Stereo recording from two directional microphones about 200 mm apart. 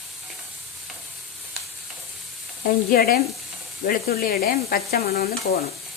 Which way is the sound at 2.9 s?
50° left (ahead or behind).